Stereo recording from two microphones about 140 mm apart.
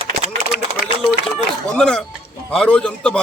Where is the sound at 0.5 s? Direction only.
90° left.